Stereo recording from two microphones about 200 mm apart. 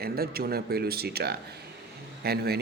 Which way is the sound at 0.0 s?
50° right (ahead or behind).